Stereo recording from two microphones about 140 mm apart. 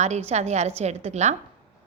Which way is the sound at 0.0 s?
50° right (ahead or behind).